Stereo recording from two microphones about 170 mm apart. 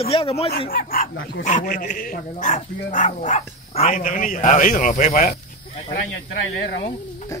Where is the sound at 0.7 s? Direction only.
60° left (ahead or behind).